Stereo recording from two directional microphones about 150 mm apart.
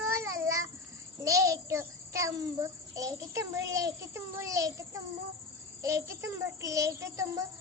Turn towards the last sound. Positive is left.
turn(degrees=-20)  # may be behind; listen again after turning